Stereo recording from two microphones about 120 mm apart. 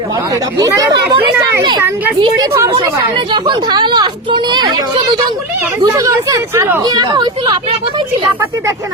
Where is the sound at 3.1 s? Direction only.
45° right (ahead or behind); by 6.8 s 25° right (ahead or behind).